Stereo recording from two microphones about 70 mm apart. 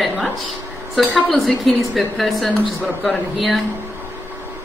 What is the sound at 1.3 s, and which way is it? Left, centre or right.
A woman's voice, centre.